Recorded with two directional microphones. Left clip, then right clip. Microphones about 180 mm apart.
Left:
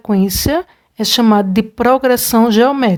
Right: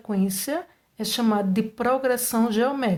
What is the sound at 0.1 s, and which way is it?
A woman's voice, 35° left (ahead or behind).